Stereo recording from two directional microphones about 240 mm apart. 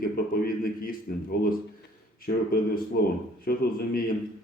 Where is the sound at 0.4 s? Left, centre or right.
Left.